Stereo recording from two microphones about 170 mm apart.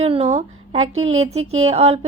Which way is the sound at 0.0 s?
40° right (ahead or behind).